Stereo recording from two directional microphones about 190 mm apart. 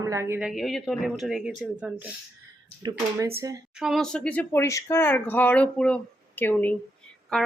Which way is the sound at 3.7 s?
Centre (ahead or behind).